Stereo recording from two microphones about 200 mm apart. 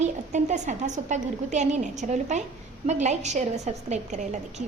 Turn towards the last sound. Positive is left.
turn(degrees=-35)  # may be behind; listen again after turning